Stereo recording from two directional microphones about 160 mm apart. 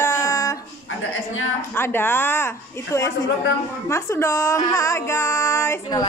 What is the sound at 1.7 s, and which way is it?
Speech, 15° left (ahead or behind).